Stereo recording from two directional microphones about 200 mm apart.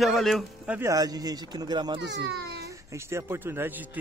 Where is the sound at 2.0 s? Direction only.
60° right (ahead or behind).